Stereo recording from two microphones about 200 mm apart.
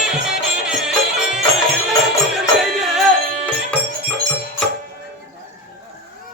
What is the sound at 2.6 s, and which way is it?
Music, centre (ahead or behind).